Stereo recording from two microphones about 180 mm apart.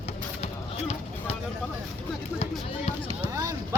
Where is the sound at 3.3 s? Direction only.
20° right (ahead or behind).